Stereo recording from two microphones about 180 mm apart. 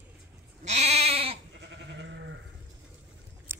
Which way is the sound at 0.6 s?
40° right (ahead or behind).